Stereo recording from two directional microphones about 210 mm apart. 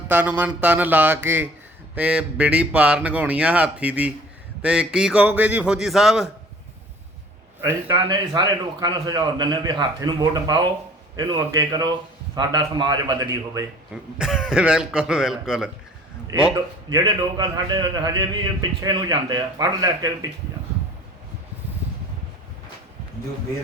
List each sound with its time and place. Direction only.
0.1 s speech: 10° right (ahead or behind)
7.9 s a man's voice: 25° right (ahead or behind)
13.9 s speech: centre (ahead or behind)
16.9 s a man's voice: 20° right (ahead or behind)